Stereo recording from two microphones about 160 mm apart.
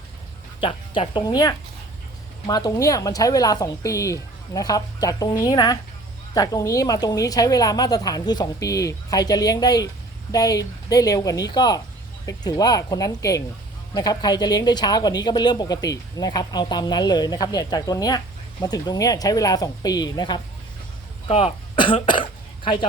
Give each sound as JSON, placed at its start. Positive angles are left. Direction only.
{"t": 0.6, "sound": "speech", "side_deg": 30}